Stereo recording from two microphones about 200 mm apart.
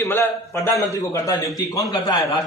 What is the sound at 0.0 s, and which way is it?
A man's voice, 15° left (ahead or behind).